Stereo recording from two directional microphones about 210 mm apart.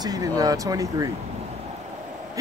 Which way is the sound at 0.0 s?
15° right (ahead or behind).